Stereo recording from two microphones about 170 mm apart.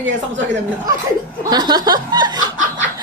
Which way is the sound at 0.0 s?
90° right.